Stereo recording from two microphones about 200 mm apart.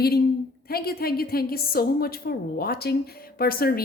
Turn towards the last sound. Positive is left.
turn(degrees=50)  # may be behind; listen again after turning